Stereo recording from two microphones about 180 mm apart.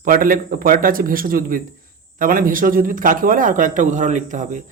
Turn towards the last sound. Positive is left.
turn(degrees=-45)  # may be behind; listen again after turning